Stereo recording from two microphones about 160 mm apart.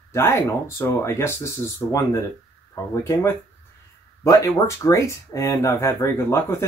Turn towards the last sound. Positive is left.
turn(degrees=15)  # may be behind; listen again after turning